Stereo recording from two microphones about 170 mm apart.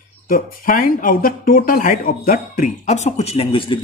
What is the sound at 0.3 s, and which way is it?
Speech, 55° left (ahead or behind).